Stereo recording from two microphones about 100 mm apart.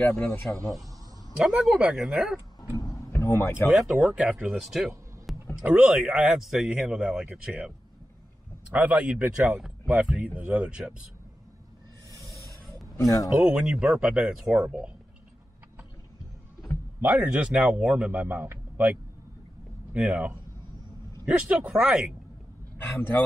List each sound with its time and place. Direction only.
0.0 s speech: 10° left (ahead or behind)
1.4 s speech: 5° right (ahead or behind)
2.8 s music: 35° left (ahead or behind)
3.2 s speech: 25° left (ahead or behind)
3.7 s a man's voice: 5° right (ahead or behind)
5.6 s speech: 15° right (ahead or behind)
8.7 s speech: 15° right (ahead or behind)
12.9 s speech: 35° left (ahead or behind)
13.4 s speech: 10° right (ahead or behind)
17.0 s speech: 15° right (ahead or behind)